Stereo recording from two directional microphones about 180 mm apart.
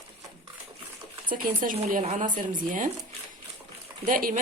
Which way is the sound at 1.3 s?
50° right (ahead or behind).